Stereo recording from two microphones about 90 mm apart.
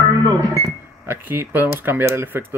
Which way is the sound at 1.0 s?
25° right (ahead or behind).